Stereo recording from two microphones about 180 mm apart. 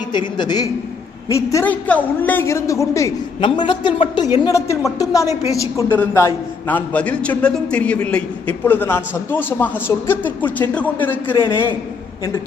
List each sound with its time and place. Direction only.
0.1 s a man's voice: 25° left (ahead or behind)
3.4 s a man's voice: 25° left (ahead or behind); by 11.3 s 10° left (ahead or behind)